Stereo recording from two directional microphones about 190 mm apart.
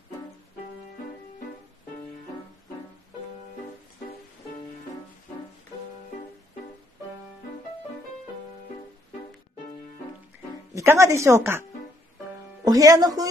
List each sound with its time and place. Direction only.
10.7 s speech: 15° right (ahead or behind)
12.6 s speech: 20° right (ahead or behind)